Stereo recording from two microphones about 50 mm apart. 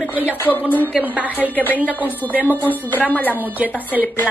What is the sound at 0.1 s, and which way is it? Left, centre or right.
Speech, right.